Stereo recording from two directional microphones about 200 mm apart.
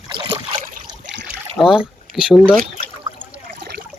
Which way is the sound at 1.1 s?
65° right (ahead or behind).